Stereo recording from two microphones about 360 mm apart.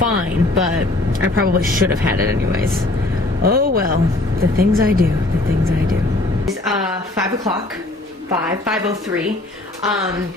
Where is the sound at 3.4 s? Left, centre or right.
Right.